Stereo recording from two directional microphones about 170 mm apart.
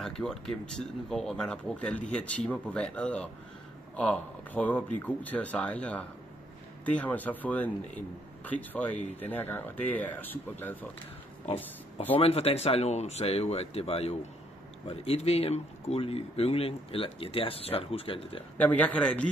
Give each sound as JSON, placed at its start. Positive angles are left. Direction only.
{"t": 0.0, "sound": "speech", "side_deg": 5}
{"t": 12.2, "sound": "speech", "side_deg": 35}
{"t": 18.6, "sound": "speech", "side_deg": 10}